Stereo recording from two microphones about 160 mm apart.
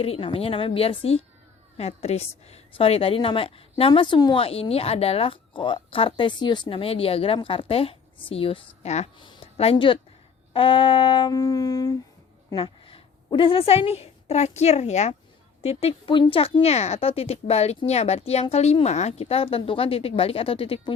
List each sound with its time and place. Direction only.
0.0 s a woman's voice: 35° left (ahead or behind)
9.1 s a woman's voice: 30° left (ahead or behind)
12.5 s a woman's voice: 35° left (ahead or behind)